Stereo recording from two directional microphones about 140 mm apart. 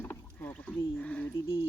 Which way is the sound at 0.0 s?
15° left (ahead or behind).